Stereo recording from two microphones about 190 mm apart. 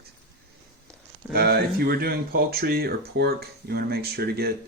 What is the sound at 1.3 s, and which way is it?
Speech, 55° right (ahead or behind).